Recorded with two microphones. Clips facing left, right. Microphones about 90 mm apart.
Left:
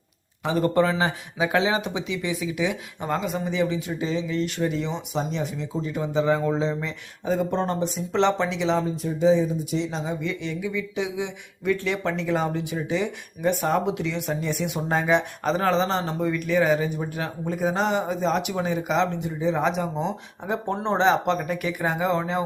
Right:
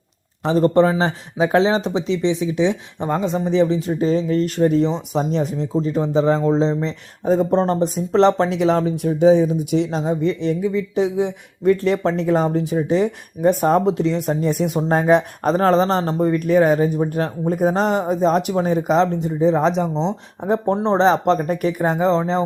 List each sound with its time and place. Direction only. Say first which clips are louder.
0.4 s speech: right 6 dB; 35° right (ahead or behind); by 8.8 s 50° right (ahead or behind)
8.8 s speech: right 7 dB; 65° right (ahead or behind)
10.2 s speech: right 9 dB; 40° right (ahead or behind)